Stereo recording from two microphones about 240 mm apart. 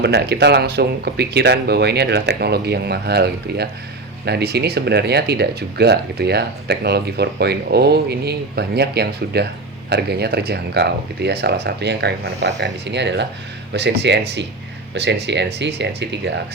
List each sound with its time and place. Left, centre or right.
0.0 s speech: right